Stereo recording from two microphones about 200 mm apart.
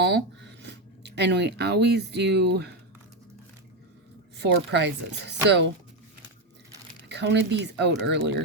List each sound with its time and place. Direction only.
0.0 s speech: 60° right (ahead or behind)
4.4 s speech: 60° right (ahead or behind)
7.1 s speech: 60° right (ahead or behind)